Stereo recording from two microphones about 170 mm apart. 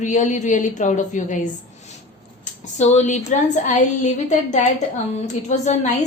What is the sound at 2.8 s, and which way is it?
A woman's voice, 45° left (ahead or behind).